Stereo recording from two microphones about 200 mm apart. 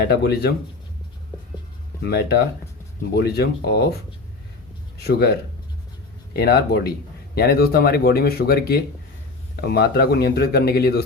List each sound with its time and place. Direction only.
0.0 s speech: 55° left (ahead or behind)
2.0 s speech: 55° left (ahead or behind)
5.0 s speech: 50° left (ahead or behind)